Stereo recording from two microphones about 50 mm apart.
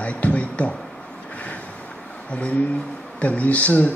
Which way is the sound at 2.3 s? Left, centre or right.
Left.